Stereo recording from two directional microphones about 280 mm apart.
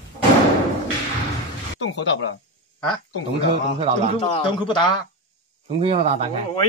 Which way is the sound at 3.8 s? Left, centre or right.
Right.